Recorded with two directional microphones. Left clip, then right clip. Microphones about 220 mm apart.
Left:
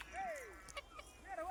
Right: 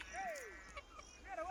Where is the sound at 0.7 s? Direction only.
30° left (ahead or behind).